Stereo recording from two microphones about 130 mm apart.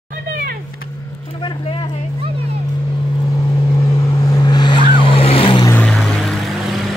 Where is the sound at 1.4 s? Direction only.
40° left (ahead or behind).